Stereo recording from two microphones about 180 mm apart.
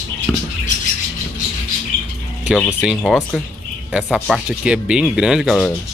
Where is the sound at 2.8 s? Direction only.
Centre (ahead or behind).